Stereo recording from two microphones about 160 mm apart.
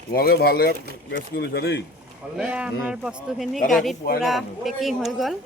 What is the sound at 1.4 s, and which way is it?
Speech, 90° left.